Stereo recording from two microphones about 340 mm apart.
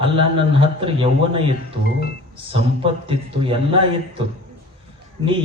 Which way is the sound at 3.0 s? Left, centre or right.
Centre.